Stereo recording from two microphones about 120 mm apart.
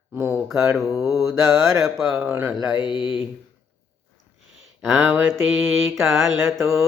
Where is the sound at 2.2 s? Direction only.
15° right (ahead or behind).